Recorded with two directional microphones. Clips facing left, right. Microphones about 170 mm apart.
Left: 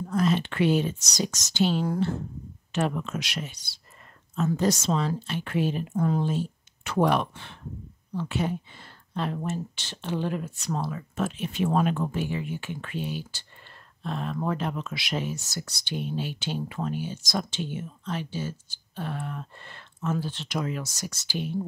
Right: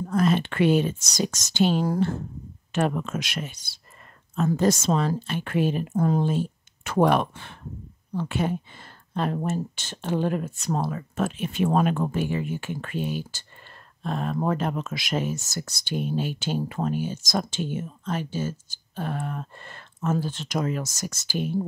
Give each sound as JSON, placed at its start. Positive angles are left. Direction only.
{"t": 0.1, "sound": "speech", "side_deg": -55}